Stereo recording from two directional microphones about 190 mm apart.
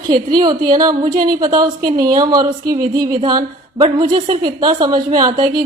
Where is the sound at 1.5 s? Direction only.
20° right (ahead or behind).